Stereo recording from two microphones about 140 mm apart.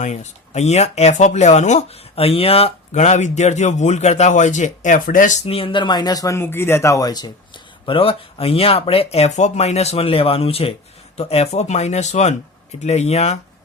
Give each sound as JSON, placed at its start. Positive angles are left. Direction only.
{"t": 0.0, "sound": "speech", "side_deg": 60}
{"t": 5.5, "sound": "speech", "side_deg": 40}